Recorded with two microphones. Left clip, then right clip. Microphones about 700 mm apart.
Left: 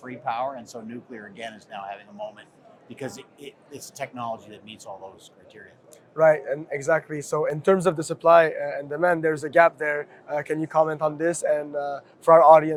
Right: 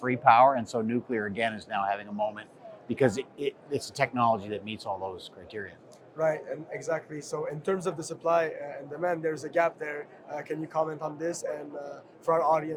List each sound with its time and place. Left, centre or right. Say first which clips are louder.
0.0 s speech: right 9 dB; right
6.1 s speech: left 10 dB; left